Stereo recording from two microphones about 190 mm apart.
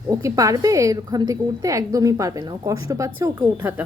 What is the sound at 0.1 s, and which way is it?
A woman's voice, 15° right (ahead or behind).